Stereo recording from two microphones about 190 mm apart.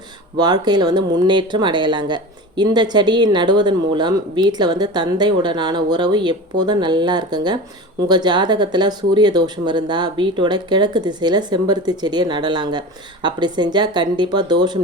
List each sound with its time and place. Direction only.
0.3 s speech: 20° right (ahead or behind)